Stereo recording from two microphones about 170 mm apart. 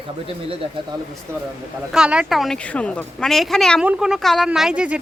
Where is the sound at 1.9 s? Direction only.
5° right (ahead or behind).